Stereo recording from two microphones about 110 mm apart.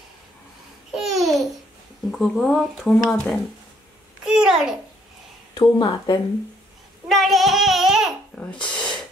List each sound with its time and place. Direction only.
0.9 s babbling: centre (ahead or behind)
2.0 s speech: centre (ahead or behind)
4.2 s babbling: 5° right (ahead or behind)
5.5 s speech: 40° left (ahead or behind)
7.1 s child singing: centre (ahead or behind)
8.4 s a sound: 10° left (ahead or behind)